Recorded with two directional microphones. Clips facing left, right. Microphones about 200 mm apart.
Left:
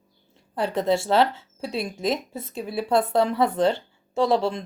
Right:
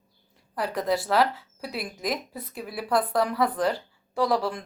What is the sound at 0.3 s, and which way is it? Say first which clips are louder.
Speech: left 4 dB; 25° left (ahead or behind).